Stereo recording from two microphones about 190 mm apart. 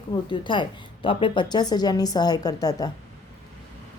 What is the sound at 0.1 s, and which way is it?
A woman's voice, 25° left (ahead or behind).